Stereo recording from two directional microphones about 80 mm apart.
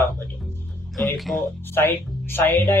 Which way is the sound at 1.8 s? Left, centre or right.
Left.